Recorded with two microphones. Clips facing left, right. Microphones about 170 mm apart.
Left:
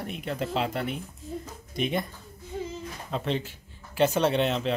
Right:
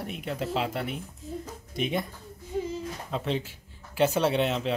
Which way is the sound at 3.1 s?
5° right (ahead or behind).